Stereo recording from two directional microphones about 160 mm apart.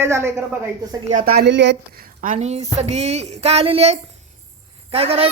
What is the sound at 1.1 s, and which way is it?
Speech, 60° right (ahead or behind).